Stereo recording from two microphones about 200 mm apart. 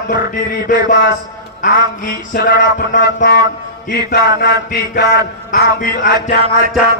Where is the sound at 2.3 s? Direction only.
45° left (ahead or behind).